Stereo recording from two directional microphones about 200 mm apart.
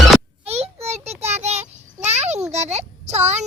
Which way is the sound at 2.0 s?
35° right (ahead or behind).